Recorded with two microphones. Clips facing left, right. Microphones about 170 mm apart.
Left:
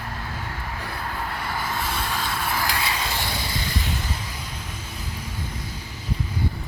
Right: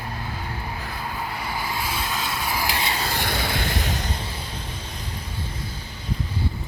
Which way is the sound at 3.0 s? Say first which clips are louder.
Right 3 dB; 55° right (ahead or behind).